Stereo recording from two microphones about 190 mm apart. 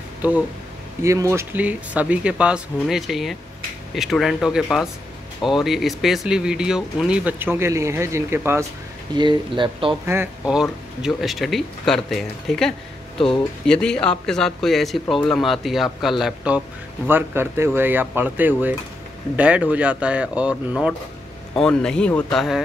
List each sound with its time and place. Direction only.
0.2 s a man's voice: 10° right (ahead or behind)
9.1 s speech: 25° right (ahead or behind)
10.0 s a man's voice: 10° right (ahead or behind)